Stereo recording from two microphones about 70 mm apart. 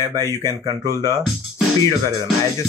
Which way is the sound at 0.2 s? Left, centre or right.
Left.